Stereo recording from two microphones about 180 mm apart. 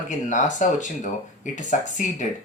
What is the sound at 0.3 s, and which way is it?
Speech, 45° left (ahead or behind).